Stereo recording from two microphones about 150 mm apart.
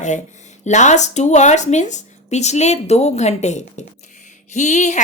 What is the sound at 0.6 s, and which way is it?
Speech, 50° left (ahead or behind).